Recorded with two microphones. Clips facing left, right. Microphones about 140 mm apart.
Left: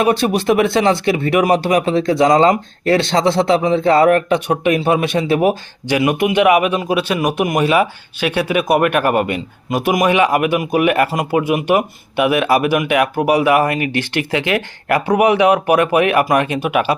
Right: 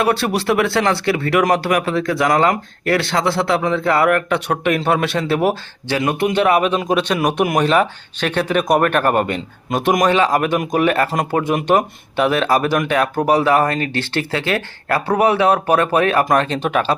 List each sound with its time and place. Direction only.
0.0 s speech: 15° left (ahead or behind)